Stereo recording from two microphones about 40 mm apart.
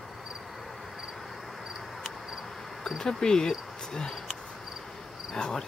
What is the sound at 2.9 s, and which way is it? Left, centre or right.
Speech, centre.